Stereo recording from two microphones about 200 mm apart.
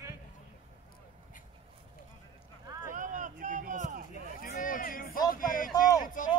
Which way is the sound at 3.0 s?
40° right (ahead or behind).